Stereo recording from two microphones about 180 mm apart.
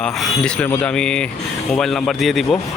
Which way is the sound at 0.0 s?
5° left (ahead or behind).